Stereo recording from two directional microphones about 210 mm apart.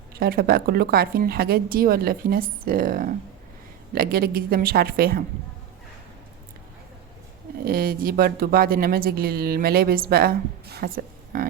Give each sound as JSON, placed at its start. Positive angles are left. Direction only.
{"t": 0.2, "sound": "speech", "side_deg": -45}
{"t": 7.6, "sound": "speech", "side_deg": -45}